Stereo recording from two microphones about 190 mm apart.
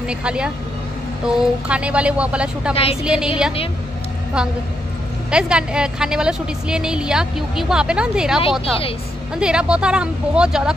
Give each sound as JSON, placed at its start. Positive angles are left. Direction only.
{"t": 0.1, "sound": "a woman's voice", "side_deg": -5}
{"t": 2.7, "sound": "a woman's voice", "side_deg": 30}
{"t": 3.0, "sound": "a woman's voice", "side_deg": -5}
{"t": 5.3, "sound": "a woman's voice", "side_deg": -5}